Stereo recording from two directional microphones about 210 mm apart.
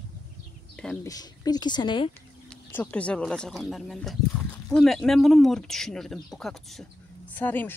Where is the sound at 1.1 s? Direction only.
20° left (ahead or behind).